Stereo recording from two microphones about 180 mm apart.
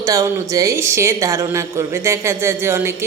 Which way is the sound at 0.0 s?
20° right (ahead or behind).